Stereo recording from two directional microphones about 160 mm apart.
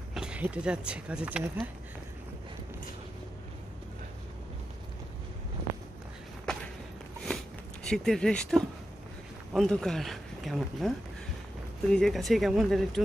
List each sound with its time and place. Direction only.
0.1 s speech: 5° right (ahead or behind)
6.5 s a sound: 5° left (ahead or behind)
7.8 s speech: 5° left (ahead or behind)